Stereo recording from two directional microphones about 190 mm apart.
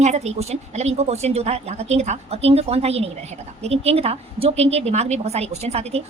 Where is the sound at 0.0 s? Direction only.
35° right (ahead or behind).